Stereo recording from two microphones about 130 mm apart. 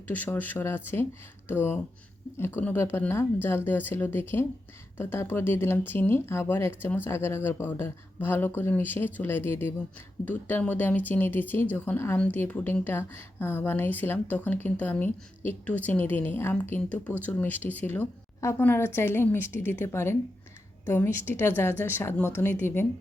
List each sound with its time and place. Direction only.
0.1 s a woman's voice: 15° left (ahead or behind)